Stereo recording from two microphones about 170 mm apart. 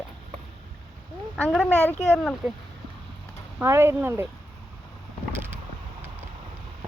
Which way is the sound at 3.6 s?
15° right (ahead or behind).